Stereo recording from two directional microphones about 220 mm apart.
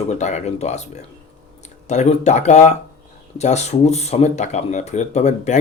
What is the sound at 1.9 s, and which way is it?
Speech, 30° left (ahead or behind).